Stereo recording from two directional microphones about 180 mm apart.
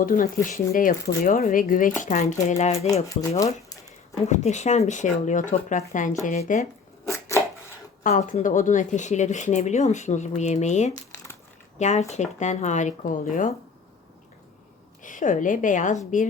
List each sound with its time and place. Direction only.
0.0 s speech: 50° left (ahead or behind)
4.3 s speech: 40° left (ahead or behind)
7.0 s chopping: 15° left (ahead or behind)
8.0 s speech: 45° left (ahead or behind)
15.0 s speech: 45° left (ahead or behind)